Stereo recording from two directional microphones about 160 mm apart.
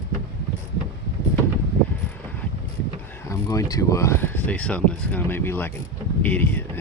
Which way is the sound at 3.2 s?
20° left (ahead or behind).